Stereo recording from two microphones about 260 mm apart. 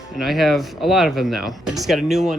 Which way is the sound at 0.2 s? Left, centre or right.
Centre.